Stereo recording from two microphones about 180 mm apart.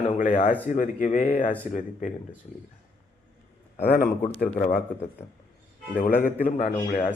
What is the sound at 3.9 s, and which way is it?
Speech, 55° left (ahead or behind).